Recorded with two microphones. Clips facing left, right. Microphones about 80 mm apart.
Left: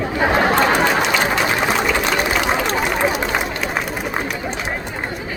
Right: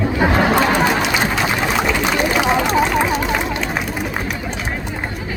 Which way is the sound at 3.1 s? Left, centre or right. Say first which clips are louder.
Right 2 dB; centre.